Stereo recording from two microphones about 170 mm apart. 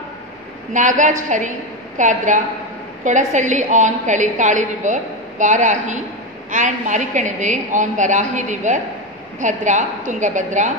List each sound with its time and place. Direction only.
0.7 s a woman's voice: 45° right (ahead or behind)